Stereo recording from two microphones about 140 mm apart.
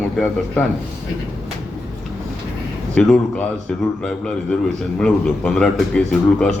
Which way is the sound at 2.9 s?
5° left (ahead or behind).